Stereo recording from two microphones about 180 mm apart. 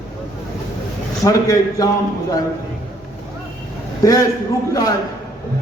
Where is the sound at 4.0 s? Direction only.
20° left (ahead or behind).